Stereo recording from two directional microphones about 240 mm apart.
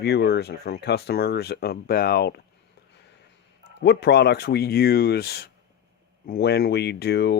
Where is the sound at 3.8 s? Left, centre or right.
Left.